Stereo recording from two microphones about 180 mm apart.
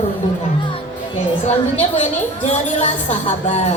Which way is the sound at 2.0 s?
40° left (ahead or behind).